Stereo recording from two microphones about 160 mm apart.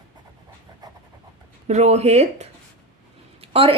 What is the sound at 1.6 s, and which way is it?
A woman's voice, 45° right (ahead or behind).